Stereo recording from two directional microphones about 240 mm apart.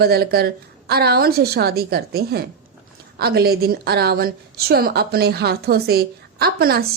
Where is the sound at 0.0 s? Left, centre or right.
Right.